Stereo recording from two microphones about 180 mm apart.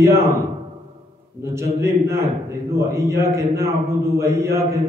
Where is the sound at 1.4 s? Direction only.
15° right (ahead or behind).